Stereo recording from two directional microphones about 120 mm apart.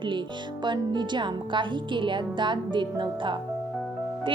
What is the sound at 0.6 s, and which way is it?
A woman's voice, 40° right (ahead or behind).